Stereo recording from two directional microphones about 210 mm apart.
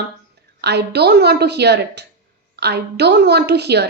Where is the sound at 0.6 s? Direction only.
50° right (ahead or behind).